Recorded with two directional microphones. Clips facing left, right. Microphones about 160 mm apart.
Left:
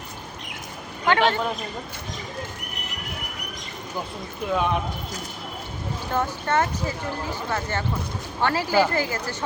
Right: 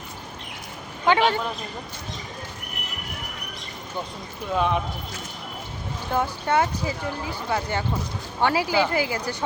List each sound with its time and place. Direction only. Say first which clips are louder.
1.0 s speech: right 1 dB; 10° right (ahead or behind)
4.5 s speech: right 1 dB; centre (ahead or behind)
6.1 s speech: right 1 dB; 10° right (ahead or behind)